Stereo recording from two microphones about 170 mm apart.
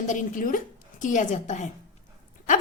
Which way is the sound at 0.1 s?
50° left (ahead or behind).